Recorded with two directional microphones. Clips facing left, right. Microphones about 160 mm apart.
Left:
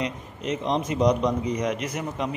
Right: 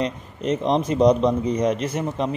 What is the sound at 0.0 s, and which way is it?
A man's voice, 35° right (ahead or behind).